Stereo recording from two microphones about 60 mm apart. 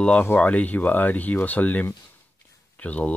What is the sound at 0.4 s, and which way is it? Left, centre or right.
Speech, left.